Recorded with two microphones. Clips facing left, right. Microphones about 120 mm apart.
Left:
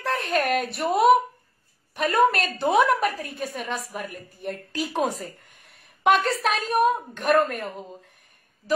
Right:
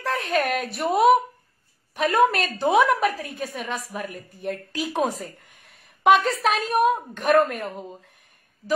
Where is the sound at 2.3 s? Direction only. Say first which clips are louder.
Right 1 dB; 5° right (ahead or behind).